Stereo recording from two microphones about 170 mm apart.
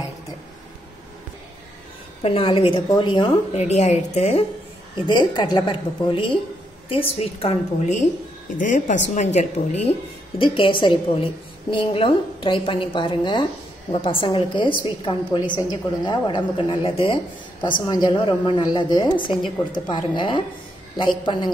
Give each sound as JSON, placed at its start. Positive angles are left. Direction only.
{"t": 2.2, "sound": "a woman's voice", "side_deg": 35}
{"t": 3.6, "sound": "a woman's voice", "side_deg": 40}
{"t": 4.9, "sound": "a woman's voice", "side_deg": 25}